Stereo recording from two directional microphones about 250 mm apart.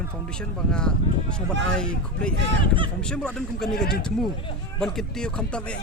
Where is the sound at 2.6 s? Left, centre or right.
Centre.